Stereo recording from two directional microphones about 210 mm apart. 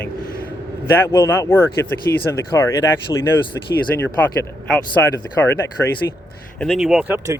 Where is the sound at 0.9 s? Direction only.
10° left (ahead or behind).